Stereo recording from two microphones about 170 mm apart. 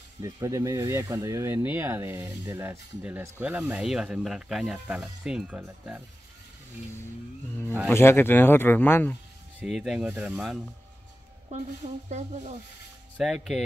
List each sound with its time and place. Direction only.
0.2 s speech: 20° right (ahead or behind)
7.9 s speech: 15° left (ahead or behind)
9.6 s speech: 5° right (ahead or behind)
11.8 s speech: 40° right (ahead or behind)
13.2 s speech: centre (ahead or behind)